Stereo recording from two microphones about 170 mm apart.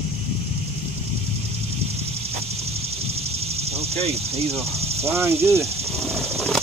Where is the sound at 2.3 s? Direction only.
35° right (ahead or behind).